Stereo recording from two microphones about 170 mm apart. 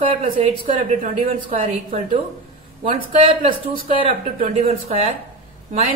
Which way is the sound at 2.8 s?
30° right (ahead or behind).